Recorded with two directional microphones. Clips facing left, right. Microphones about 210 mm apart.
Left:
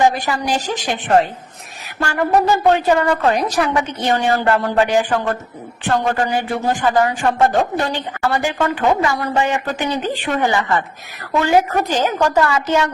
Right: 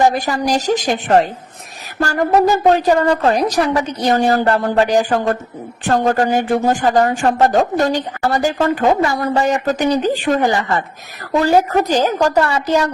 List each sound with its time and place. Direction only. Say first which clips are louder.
0.0 s a woman's voice: right 2 dB; 40° right (ahead or behind)